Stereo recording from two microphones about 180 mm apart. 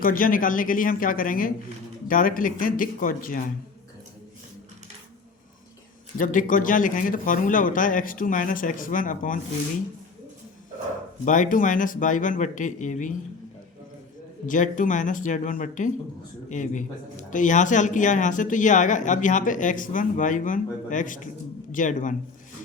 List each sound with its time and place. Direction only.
0.0 s speech: 50° left (ahead or behind)
6.1 s speech: 50° left (ahead or behind)
11.3 s speech: 45° left (ahead or behind)
14.4 s speech: 45° left (ahead or behind)